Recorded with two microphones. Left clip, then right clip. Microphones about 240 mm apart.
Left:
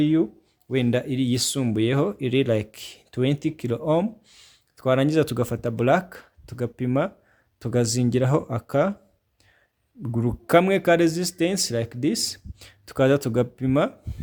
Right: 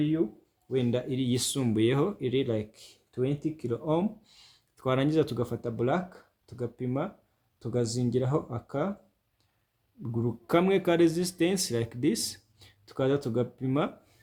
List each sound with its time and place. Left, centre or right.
0.0 s speech: left
0.7 s speech: left
10.2 s speech: left